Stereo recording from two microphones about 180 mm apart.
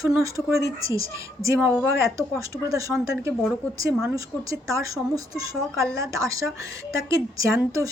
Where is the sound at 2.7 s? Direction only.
20° right (ahead or behind).